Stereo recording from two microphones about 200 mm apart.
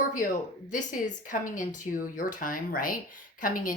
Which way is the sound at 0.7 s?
40° left (ahead or behind).